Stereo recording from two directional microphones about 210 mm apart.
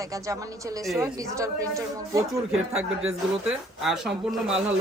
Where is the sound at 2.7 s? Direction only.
5° right (ahead or behind).